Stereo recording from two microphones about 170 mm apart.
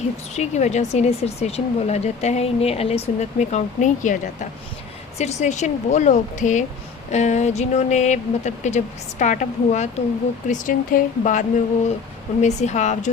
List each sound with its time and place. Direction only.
0.3 s speech: 40° left (ahead or behind)